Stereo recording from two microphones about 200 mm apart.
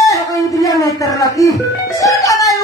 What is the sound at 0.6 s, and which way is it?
Music, 15° left (ahead or behind).